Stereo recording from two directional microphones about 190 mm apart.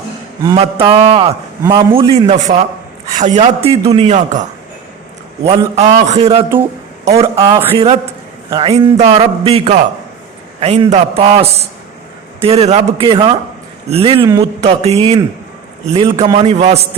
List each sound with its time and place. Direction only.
0.6 s a man's voice: 30° right (ahead or behind)
5.5 s a man's voice: 35° right (ahead or behind)
6.5 s a sound: 10° right (ahead or behind)
7.3 s a man's voice: 20° right (ahead or behind); by 16.8 s 35° right (ahead or behind)